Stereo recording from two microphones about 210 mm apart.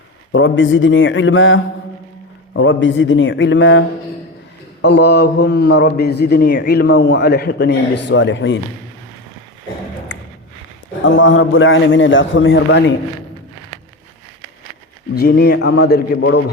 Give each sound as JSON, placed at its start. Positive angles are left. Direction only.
{"t": 0.3, "sound": "a man's voice", "side_deg": 65}
{"t": 11.0, "sound": "a man's voice", "side_deg": 60}
{"t": 15.1, "sound": "a man's voice", "side_deg": 50}